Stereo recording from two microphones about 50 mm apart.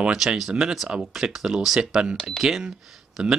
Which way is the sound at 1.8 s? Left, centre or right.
Centre.